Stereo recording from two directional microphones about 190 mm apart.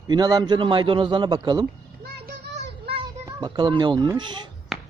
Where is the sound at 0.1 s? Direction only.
20° right (ahead or behind).